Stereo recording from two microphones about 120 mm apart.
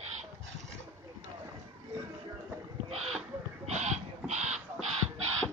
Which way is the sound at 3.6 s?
75° right (ahead or behind).